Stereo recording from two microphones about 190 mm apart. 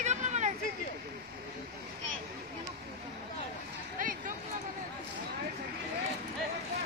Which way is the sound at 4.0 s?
45° right (ahead or behind).